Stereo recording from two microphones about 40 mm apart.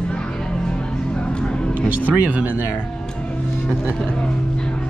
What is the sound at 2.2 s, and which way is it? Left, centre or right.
Speech, right.